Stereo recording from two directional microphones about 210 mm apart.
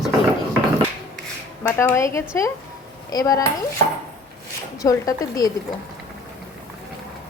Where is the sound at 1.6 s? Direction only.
10° left (ahead or behind).